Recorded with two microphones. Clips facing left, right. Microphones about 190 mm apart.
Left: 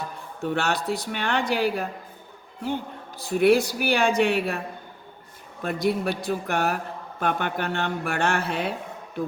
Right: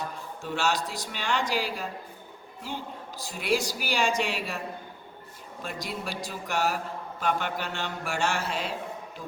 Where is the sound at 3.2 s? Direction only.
60° left (ahead or behind).